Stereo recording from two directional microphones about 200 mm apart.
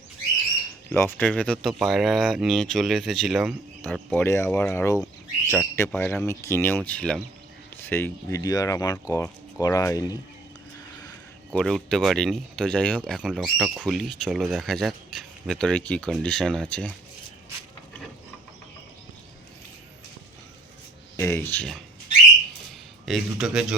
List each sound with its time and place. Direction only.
0.9 s speech: 10° left (ahead or behind)
11.5 s speech: centre (ahead or behind)
21.2 s speech: 10° left (ahead or behind)
23.0 s speech: centre (ahead or behind)